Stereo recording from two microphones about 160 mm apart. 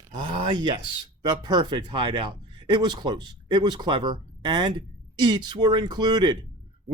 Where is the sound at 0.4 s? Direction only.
30° right (ahead or behind).